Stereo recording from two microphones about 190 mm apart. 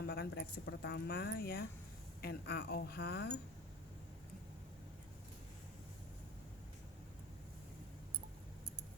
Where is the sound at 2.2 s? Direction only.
55° left (ahead or behind).